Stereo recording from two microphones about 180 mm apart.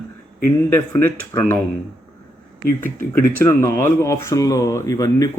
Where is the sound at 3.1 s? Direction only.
15° left (ahead or behind).